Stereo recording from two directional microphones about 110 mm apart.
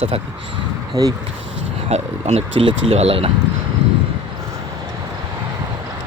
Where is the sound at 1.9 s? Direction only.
75° right (ahead or behind).